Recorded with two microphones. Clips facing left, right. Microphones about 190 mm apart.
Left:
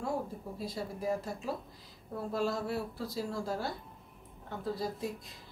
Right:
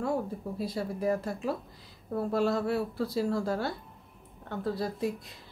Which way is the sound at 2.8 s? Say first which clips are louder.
Right 7 dB; centre (ahead or behind).